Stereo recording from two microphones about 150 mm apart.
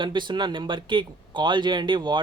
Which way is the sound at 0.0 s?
30° right (ahead or behind).